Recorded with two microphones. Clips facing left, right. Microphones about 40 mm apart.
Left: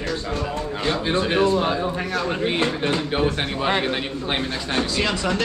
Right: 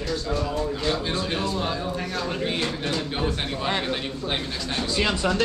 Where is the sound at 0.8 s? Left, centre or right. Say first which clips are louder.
Left 5 dB; centre.